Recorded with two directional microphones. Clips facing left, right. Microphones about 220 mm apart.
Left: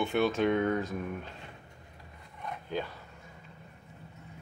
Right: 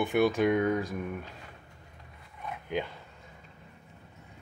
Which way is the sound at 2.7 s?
20° right (ahead or behind).